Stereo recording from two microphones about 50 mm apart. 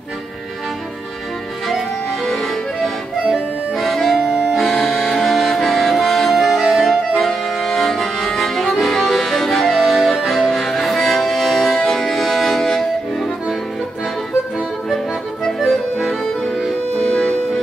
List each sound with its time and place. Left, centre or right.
2.2 s accordion: centre
4.2 s accordion: centre
4.6 s accordion: centre
15.6 s accordion: centre
16.9 s music: centre